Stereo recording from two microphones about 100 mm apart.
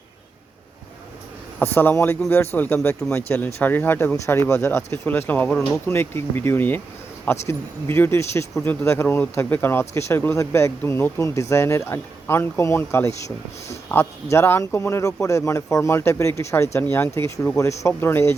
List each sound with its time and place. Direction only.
1.5 s speech: 20° left (ahead or behind)